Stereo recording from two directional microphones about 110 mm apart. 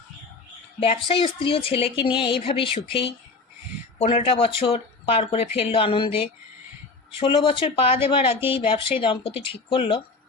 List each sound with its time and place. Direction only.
1.0 s speech: 55° left (ahead or behind)